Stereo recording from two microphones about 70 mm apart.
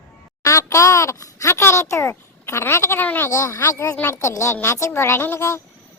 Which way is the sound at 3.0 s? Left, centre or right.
Left.